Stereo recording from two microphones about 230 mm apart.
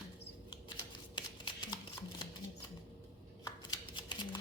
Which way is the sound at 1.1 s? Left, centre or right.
Centre.